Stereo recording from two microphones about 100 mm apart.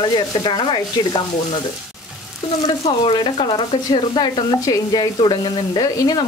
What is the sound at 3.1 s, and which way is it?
Speech, 60° left (ahead or behind).